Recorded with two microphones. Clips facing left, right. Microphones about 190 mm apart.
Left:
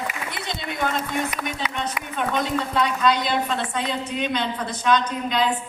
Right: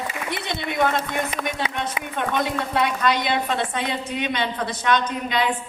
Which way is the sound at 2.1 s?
60° right (ahead or behind).